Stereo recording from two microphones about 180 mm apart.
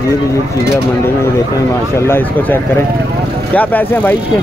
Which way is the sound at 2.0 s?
15° left (ahead or behind).